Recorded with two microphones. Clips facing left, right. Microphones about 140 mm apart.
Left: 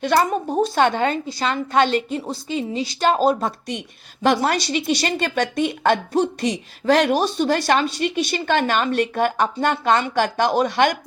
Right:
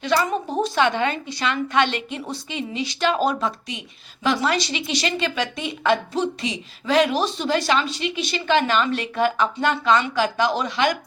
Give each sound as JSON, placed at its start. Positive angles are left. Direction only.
{"t": 0.1, "sound": "a woman's voice", "side_deg": 50}
{"t": 3.7, "sound": "a woman's voice", "side_deg": 55}